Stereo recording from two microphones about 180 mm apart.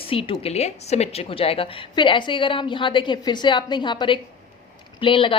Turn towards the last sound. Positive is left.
turn(degrees=30)  # may be behind; listen again after turning